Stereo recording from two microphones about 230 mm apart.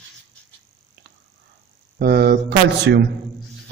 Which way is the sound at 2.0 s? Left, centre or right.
Right.